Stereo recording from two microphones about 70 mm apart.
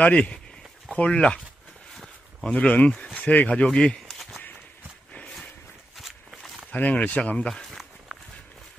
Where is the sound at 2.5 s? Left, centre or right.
Centre.